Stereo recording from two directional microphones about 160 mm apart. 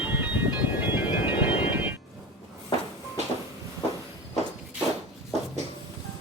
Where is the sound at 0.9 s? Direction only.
10° right (ahead or behind).